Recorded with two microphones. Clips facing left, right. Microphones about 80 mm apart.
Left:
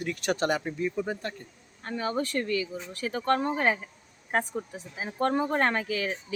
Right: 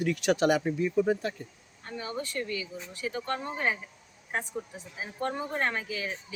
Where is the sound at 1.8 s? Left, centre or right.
Left.